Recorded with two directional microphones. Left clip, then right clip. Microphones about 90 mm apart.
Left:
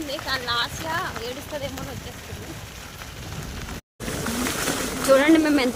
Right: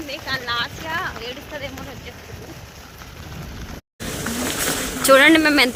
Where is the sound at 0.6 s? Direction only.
5° right (ahead or behind).